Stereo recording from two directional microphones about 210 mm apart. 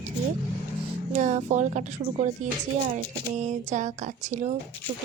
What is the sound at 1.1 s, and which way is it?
Speech, 35° right (ahead or behind).